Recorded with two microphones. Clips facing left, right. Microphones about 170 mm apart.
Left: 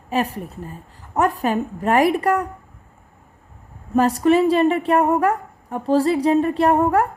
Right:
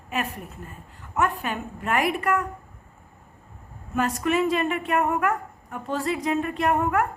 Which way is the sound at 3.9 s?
35° left (ahead or behind).